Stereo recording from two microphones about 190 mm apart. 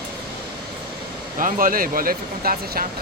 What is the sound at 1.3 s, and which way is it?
Speech, 45° right (ahead or behind).